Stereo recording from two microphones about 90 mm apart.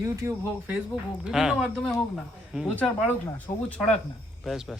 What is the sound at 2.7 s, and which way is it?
Speech, 15° left (ahead or behind).